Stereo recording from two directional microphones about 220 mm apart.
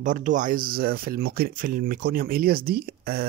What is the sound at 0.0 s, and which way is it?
Speech, 35° right (ahead or behind).